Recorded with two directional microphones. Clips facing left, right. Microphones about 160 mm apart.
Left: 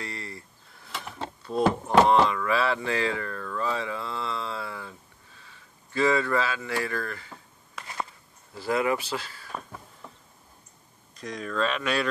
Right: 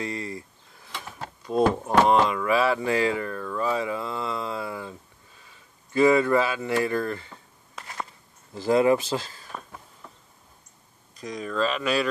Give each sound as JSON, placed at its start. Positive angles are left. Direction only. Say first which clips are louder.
{"t": 0.0, "sound": "speech", "louder": "right 7 dB", "side_deg": -20}
{"t": 1.5, "sound": "speech", "louder": "right 1 dB", "side_deg": -15}
{"t": 5.9, "sound": "speech", "louder": "right 5 dB", "side_deg": -15}
{"t": 8.5, "sound": "speech", "louder": "right 6 dB", "side_deg": -30}
{"t": 9.5, "sound": "a sound", "louder": "left 2 dB", "side_deg": 25}
{"t": 11.1, "sound": "speech", "louder": "right 2 dB", "side_deg": 0}